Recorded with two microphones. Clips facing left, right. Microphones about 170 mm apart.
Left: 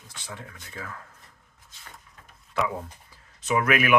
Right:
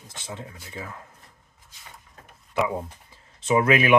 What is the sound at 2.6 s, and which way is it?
Speech, 20° right (ahead or behind).